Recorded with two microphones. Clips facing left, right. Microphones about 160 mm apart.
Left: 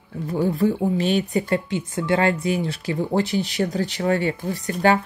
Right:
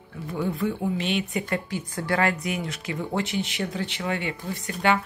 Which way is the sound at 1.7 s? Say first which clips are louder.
Left 5 dB; 25° left (ahead or behind).